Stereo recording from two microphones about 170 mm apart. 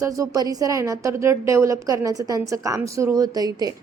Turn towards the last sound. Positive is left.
turn(degrees=-20)  # may be behind; listen again after turning